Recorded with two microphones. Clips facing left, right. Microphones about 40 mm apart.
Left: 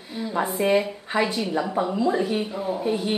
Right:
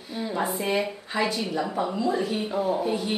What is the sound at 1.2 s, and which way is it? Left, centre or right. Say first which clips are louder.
A woman's voice: left 3 dB; centre.